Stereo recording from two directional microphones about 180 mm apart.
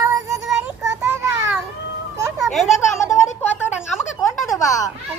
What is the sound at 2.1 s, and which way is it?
Cat, 15° right (ahead or behind).